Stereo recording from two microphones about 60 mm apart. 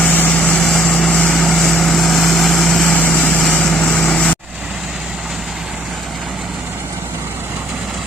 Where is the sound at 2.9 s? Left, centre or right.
Left.